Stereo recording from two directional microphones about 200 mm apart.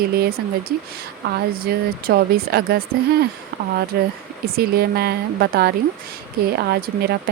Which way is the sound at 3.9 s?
55° right (ahead or behind).